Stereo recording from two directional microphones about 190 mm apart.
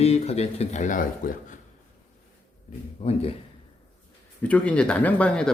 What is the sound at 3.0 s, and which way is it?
Speech, 30° left (ahead or behind).